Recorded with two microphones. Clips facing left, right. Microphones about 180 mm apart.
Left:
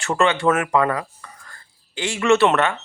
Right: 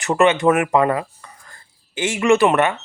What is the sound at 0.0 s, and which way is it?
Speech, 15° right (ahead or behind).